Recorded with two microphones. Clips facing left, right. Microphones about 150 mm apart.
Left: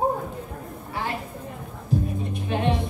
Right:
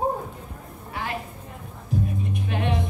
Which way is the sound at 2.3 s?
30° left (ahead or behind).